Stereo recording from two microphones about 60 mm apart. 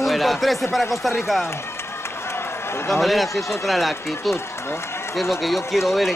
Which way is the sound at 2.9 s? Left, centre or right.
Centre.